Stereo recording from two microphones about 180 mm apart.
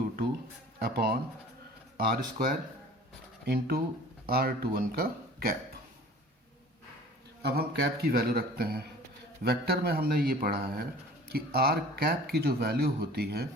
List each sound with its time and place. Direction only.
0.8 s speech: 60° right (ahead or behind)
7.4 s speech: 60° right (ahead or behind)